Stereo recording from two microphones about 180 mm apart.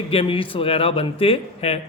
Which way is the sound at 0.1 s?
30° left (ahead or behind).